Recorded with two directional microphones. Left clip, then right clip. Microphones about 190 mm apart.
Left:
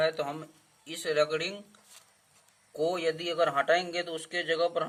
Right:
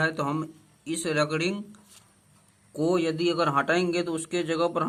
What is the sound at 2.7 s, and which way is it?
A man's voice, 25° right (ahead or behind).